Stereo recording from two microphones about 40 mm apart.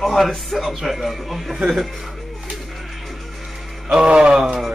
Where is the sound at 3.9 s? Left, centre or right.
Right.